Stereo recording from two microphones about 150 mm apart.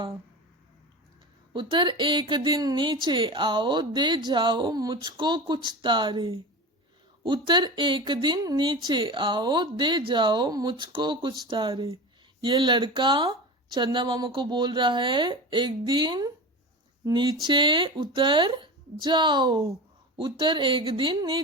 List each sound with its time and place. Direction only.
1.5 s speech: 30° right (ahead or behind)